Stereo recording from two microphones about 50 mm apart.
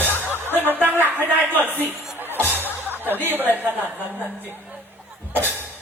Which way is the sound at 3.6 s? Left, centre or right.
Right.